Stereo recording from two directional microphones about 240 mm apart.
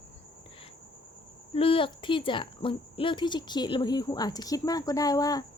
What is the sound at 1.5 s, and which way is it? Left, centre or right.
Speech, left.